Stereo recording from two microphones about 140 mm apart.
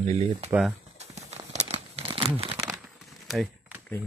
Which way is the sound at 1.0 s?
50° right (ahead or behind).